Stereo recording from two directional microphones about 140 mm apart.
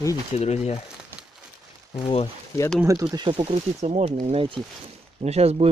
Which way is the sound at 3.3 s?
45° right (ahead or behind).